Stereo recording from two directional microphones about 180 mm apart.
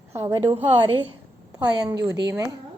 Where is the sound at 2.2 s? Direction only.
20° right (ahead or behind).